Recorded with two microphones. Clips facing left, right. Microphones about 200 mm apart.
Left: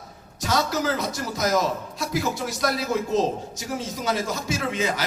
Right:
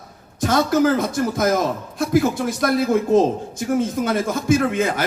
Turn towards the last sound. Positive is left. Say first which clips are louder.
# right 6 dB
turn(degrees=-55)  # may be behind; listen again after turning